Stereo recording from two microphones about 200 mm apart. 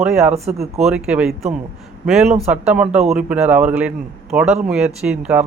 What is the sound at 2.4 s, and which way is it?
A man's voice, 5° right (ahead or behind).